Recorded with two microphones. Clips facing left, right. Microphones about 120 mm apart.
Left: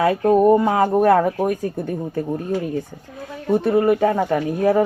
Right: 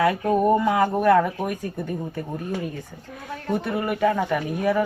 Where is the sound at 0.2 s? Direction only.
40° left (ahead or behind).